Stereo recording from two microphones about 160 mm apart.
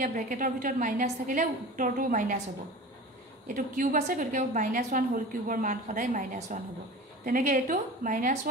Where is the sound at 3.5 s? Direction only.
60° right (ahead or behind).